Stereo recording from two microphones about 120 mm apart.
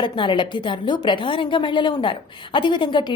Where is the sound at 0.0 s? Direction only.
40° left (ahead or behind).